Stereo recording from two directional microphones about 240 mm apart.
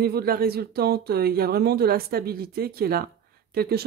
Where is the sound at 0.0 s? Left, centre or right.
Right.